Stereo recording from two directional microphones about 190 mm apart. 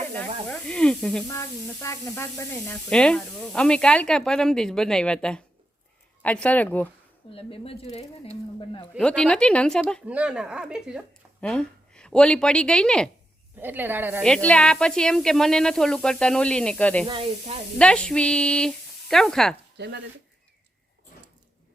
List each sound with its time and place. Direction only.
0.4 s speech: 5° left (ahead or behind)
1.3 s speech: 15° left (ahead or behind)
7.3 s speech: 30° left (ahead or behind)
9.0 s speech: 5° left (ahead or behind)
13.6 s speech: 10° right (ahead or behind)
14.2 s speech: 5° left (ahead or behind)
17.1 s speech: 30° right (ahead or behind)
17.7 s speech: 5° left (ahead or behind)
19.7 s speech: 65° right (ahead or behind)